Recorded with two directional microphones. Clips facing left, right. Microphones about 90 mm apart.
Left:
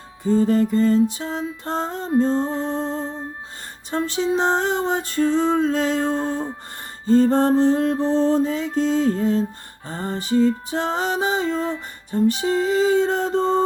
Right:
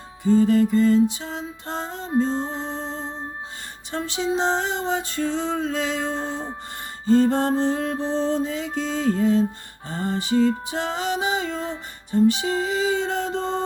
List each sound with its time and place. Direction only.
0.2 s music: 40° left (ahead or behind)